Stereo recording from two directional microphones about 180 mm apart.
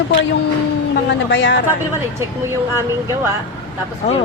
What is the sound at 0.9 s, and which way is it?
Speech, 75° left (ahead or behind).